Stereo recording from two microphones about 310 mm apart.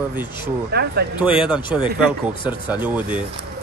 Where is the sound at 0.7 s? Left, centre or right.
Right.